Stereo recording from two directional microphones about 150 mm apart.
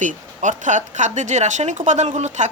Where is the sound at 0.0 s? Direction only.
55° right (ahead or behind).